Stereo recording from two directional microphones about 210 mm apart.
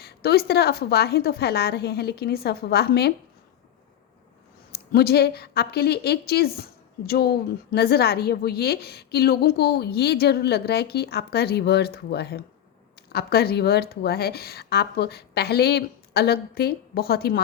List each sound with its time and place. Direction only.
0.0 s a woman's voice: 50° left (ahead or behind)
4.9 s a woman's voice: 50° left (ahead or behind)